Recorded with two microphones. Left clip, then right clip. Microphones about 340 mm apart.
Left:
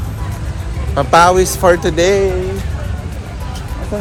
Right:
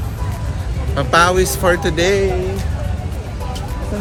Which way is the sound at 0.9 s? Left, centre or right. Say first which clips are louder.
Left 4 dB; centre.